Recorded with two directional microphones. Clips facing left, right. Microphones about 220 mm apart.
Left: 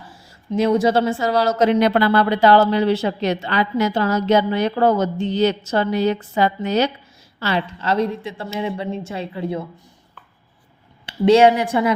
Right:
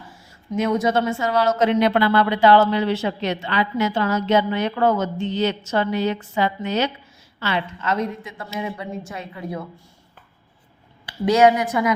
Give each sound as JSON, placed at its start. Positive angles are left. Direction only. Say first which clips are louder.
{"t": 0.5, "sound": "a woman's voice", "louder": "left 4 dB", "side_deg": 35}
{"t": 11.0, "sound": "a woman's voice", "louder": "left 3 dB", "side_deg": 30}